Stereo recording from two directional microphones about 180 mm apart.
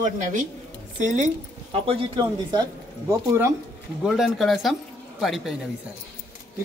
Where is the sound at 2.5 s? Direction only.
20° right (ahead or behind).